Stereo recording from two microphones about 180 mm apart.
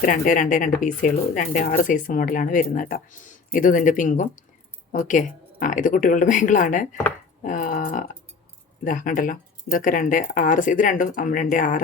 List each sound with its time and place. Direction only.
0.0 s speech: 45° left (ahead or behind)